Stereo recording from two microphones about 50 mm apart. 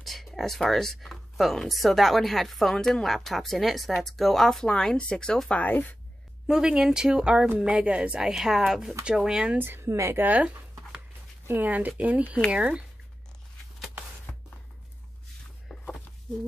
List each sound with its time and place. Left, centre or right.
0.0 s speech: centre
4.6 s speech: centre
5.5 s speech: left
6.4 s speech: centre
9.6 s speech: right
10.1 s speech: right
12.4 s speech: right
15.7 s a sound: centre